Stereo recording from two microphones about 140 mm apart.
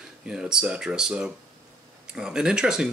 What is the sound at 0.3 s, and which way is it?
Speech, 5° right (ahead or behind).